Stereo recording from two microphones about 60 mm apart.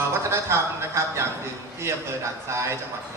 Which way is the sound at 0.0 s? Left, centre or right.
Right.